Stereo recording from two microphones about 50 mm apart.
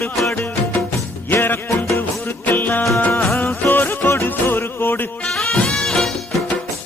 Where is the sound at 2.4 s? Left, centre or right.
Left.